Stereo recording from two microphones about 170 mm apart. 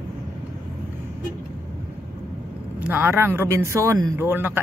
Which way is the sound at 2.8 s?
10° right (ahead or behind).